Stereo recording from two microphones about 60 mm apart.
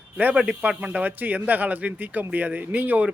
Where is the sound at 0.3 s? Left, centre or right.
Centre.